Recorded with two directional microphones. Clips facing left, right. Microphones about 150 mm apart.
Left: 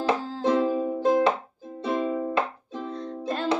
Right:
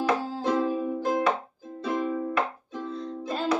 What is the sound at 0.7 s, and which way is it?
Music, 30° left (ahead or behind).